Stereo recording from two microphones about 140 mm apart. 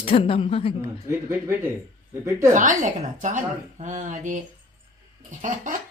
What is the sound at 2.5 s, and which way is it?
A woman's voice, 65° right (ahead or behind).